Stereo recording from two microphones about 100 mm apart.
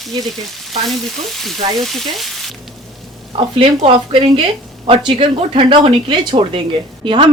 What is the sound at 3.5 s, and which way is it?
Speech, 70° right (ahead or behind).